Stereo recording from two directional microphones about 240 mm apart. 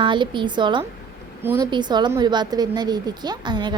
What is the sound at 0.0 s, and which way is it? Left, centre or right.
A woman's voice, centre.